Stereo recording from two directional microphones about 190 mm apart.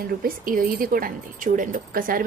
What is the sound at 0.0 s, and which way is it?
Speech, 50° right (ahead or behind).